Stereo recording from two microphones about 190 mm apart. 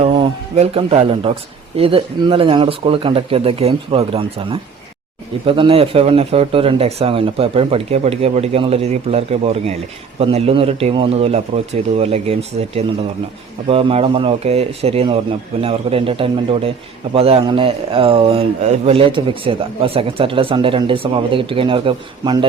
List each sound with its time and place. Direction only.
0.0 s speech: 30° right (ahead or behind)